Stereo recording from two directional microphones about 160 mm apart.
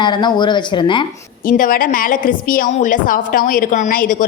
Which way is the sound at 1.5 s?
60° left (ahead or behind).